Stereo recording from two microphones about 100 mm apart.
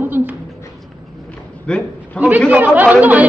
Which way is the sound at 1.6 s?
10° left (ahead or behind).